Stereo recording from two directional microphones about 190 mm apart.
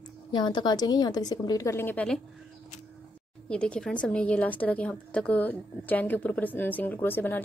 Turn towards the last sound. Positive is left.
turn(degrees=10)  # may be behind; listen again after turning